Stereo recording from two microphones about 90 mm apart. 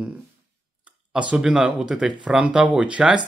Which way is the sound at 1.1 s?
10° right (ahead or behind).